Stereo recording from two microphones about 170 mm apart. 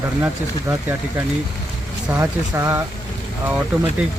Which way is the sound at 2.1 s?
20° right (ahead or behind).